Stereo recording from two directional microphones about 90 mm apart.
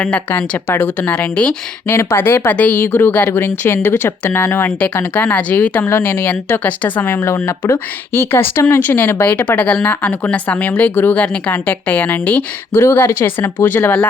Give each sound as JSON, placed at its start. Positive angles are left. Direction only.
{"t": 0.0, "sound": "a woman's voice", "side_deg": 20}
{"t": 1.9, "sound": "speech", "side_deg": 30}